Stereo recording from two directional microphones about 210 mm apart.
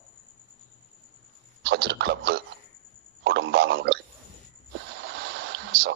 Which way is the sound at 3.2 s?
55° right (ahead or behind).